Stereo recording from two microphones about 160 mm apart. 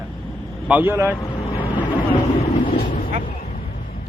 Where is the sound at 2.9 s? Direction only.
65° left (ahead or behind).